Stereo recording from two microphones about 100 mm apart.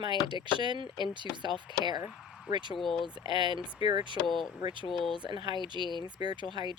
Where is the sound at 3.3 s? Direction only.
50° right (ahead or behind).